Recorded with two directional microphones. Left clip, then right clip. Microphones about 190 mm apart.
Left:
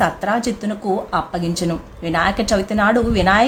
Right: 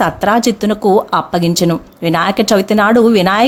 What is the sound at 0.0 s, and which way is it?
Speech, 45° right (ahead or behind).